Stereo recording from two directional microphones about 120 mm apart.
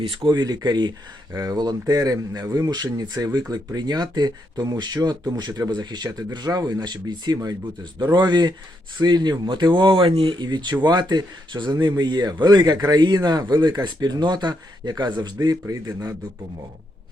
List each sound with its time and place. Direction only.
0.3 s a man's voice: 35° right (ahead or behind)